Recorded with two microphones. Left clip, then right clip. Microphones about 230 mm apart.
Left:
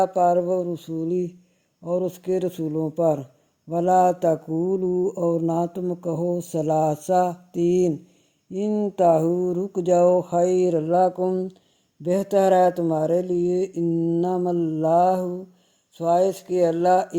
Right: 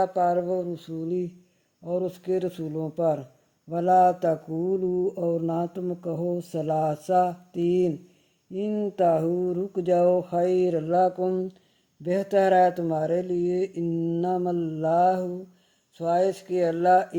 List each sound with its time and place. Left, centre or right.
0.0 s mantra: left
8.5 s speech: left